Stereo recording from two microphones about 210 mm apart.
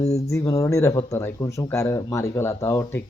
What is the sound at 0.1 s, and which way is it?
Speech, 15° left (ahead or behind).